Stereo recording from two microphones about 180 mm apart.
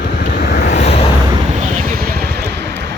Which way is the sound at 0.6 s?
40° left (ahead or behind).